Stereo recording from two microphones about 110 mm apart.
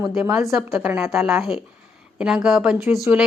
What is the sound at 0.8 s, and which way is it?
Speech, 15° right (ahead or behind).